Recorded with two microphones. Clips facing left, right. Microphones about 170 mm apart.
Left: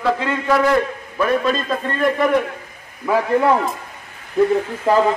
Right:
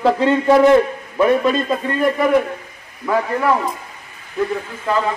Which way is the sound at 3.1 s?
20° left (ahead or behind).